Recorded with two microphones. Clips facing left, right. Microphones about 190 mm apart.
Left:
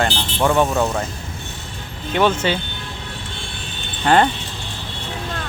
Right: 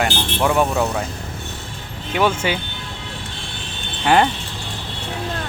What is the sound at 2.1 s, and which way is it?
Speech, 10° right (ahead or behind).